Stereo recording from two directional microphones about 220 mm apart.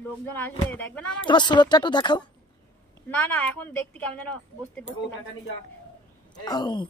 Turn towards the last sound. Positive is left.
turn(degrees=20)  # may be behind; listen again after turning